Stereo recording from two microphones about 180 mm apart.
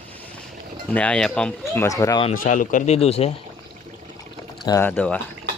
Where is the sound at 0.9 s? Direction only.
10° left (ahead or behind).